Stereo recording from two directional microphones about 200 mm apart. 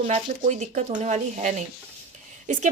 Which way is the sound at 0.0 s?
35° right (ahead or behind).